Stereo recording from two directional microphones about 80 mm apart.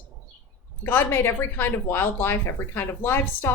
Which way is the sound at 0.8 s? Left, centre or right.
Left.